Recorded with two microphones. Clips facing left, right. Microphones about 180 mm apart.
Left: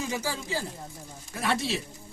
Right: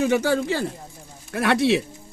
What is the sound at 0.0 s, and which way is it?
Speech, 65° right (ahead or behind).